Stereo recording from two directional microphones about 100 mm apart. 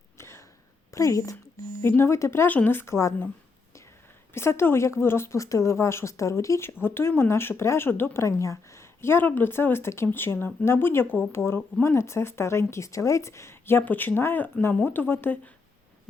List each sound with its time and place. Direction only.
0.2 s a sound: 25° left (ahead or behind)
0.9 s a woman's voice: 35° left (ahead or behind)
4.4 s speech: 25° left (ahead or behind)